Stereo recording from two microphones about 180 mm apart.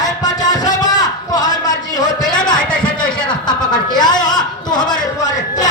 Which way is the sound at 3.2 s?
25° left (ahead or behind).